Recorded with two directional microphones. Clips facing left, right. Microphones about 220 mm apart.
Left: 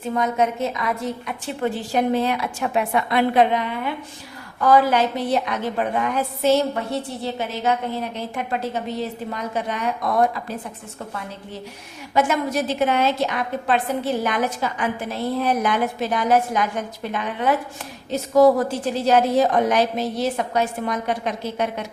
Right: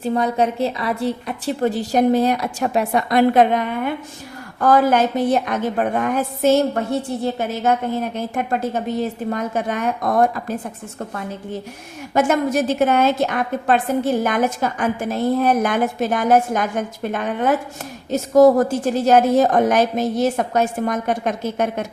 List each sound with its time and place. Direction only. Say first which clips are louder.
0.0 s a woman's voice: right 3 dB; 35° right (ahead or behind)
12.1 s a woman's voice: right 3 dB; 50° right (ahead or behind)